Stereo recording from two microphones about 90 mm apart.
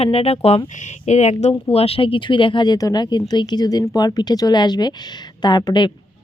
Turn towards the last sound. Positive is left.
turn(degrees=55)  # may be behind; listen again after turning